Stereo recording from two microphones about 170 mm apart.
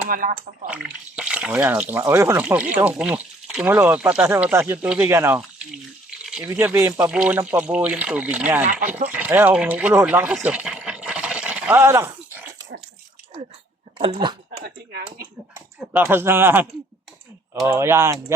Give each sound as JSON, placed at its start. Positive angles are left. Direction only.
{"t": 0.1, "sound": "speech", "side_deg": -55}
{"t": 0.7, "sound": "speech", "side_deg": -5}
{"t": 10.3, "sound": "a sound", "side_deg": -5}
{"t": 14.0, "sound": "speech", "side_deg": -30}
{"t": 15.5, "sound": "speech", "side_deg": -10}
{"t": 17.7, "sound": "speech", "side_deg": -15}